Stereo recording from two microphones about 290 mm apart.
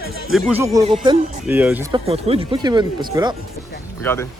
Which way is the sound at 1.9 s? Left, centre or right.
Centre.